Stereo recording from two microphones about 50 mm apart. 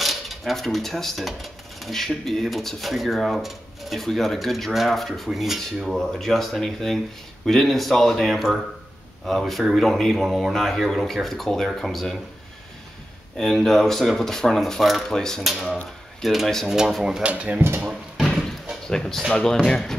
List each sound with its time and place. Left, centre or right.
0.0 s speech: centre
5.9 s speech: centre
13.4 s speech: centre
15.0 s speech: centre
15.4 s speech: centre
17.2 s speech: right
17.6 s speech: right
18.9 s speech: centre